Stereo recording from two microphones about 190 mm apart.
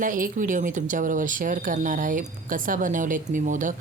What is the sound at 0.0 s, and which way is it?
Speech, 45° right (ahead or behind).